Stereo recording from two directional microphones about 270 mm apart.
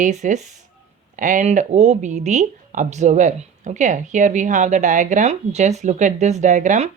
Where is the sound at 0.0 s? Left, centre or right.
Right.